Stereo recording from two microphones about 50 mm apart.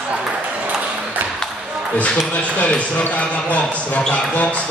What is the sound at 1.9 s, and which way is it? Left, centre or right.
Speech, left.